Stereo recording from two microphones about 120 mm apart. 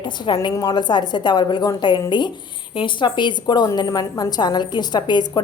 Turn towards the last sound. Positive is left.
turn(degrees=35)  # may be behind; listen again after turning